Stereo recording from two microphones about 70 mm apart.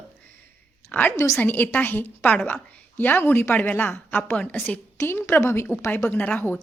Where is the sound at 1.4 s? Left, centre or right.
Left.